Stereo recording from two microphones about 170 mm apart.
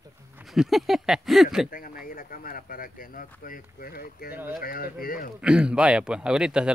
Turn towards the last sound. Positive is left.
turn(degrees=-5)  # may be behind; listen again after turning